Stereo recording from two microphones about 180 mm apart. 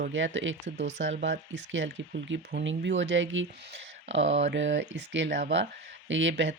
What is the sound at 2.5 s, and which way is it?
Speech, 70° right (ahead or behind).